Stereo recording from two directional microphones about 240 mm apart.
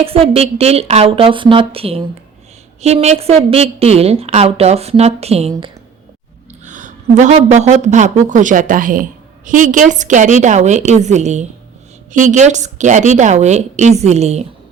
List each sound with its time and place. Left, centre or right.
0.0 s a woman's voice: right
6.7 s a woman's voice: right